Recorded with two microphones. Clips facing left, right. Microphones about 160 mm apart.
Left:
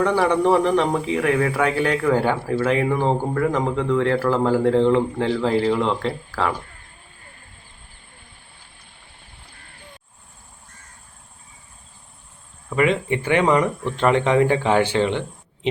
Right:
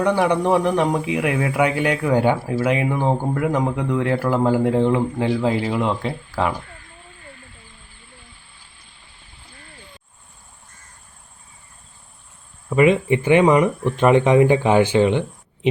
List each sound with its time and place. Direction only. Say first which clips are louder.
0.0 s a man's voice: even; 15° right (ahead or behind)
12.7 s a man's voice: right 4 dB; 20° right (ahead or behind)